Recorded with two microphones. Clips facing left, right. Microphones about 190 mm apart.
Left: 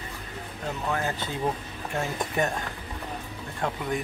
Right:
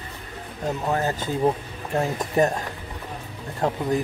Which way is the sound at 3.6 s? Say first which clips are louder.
Right 6 dB; 35° right (ahead or behind).